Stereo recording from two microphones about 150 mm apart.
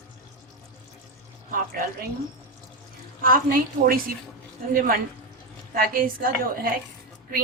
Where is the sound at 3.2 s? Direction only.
70° right (ahead or behind).